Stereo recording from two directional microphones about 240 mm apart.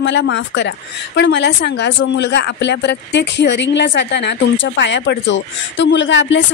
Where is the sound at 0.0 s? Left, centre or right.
Left.